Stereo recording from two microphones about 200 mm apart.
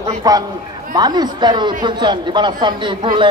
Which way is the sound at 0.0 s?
20° right (ahead or behind).